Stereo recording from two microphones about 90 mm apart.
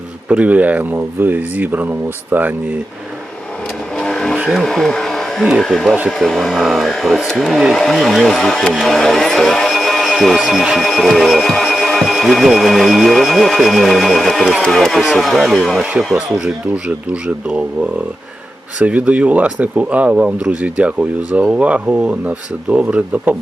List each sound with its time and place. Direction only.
0.3 s speech: 15° right (ahead or behind)
3.9 s vehicle: 5° left (ahead or behind)
4.4 s a sound: 5° right (ahead or behind)
4.6 s speech: 5° left (ahead or behind)
15.8 s speech: 15° right (ahead or behind)